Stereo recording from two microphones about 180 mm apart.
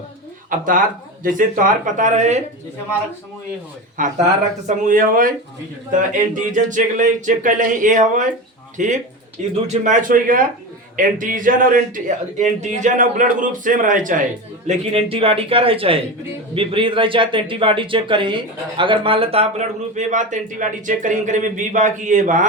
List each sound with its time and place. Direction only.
0.5 s a man's voice: 50° right (ahead or behind)
3.9 s a man's voice: 45° right (ahead or behind)
14.7 s speech: 30° right (ahead or behind)